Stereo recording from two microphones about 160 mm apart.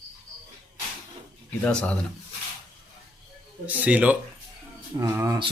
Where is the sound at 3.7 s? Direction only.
10° right (ahead or behind).